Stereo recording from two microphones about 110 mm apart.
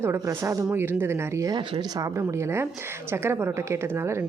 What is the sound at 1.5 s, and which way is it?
Speech, 40° right (ahead or behind).